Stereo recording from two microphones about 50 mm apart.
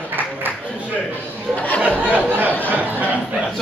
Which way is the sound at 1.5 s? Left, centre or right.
Left.